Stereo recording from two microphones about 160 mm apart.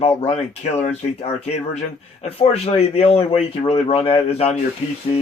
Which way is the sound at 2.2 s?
40° left (ahead or behind).